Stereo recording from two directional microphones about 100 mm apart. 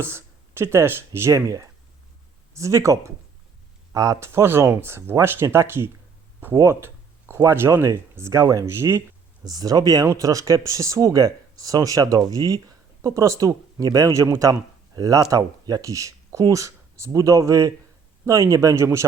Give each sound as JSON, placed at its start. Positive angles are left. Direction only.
{"t": 0.0, "sound": "speech", "side_deg": -25}
{"t": 6.6, "sound": "a sound", "side_deg": -25}
{"t": 7.3, "sound": "speech", "side_deg": -25}
{"t": 9.4, "sound": "speech", "side_deg": -40}